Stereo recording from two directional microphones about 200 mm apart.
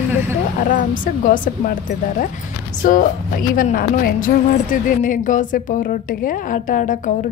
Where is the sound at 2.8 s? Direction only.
40° left (ahead or behind).